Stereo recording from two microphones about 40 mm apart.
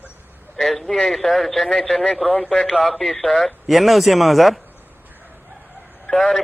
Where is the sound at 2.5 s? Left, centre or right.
Centre.